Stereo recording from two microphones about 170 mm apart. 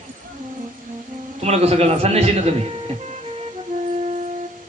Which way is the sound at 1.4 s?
35° right (ahead or behind).